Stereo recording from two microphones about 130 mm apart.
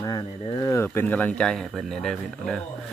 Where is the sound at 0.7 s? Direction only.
15° left (ahead or behind).